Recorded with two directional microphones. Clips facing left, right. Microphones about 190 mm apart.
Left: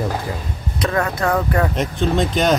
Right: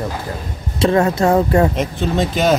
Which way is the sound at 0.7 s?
25° right (ahead or behind).